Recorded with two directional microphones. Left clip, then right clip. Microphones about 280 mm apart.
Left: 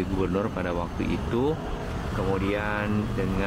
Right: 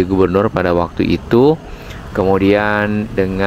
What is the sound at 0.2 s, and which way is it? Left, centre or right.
Speech, right.